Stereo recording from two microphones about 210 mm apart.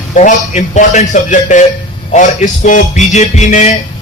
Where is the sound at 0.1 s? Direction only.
35° left (ahead or behind).